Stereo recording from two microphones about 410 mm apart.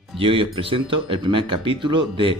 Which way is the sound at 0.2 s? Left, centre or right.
Centre.